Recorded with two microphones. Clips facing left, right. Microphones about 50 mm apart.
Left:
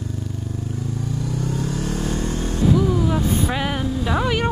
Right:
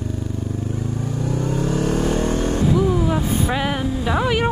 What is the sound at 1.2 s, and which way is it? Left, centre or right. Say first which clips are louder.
Vehicle: right 5 dB; right.